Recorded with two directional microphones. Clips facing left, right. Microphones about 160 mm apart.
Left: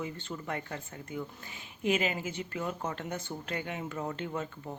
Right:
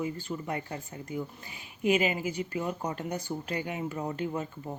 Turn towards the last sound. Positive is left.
turn(degrees=-10)  # may be behind; listen again after turning